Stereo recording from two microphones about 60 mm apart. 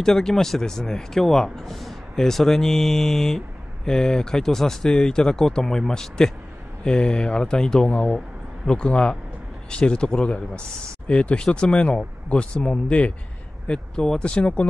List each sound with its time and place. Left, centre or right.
0.0 s speech: centre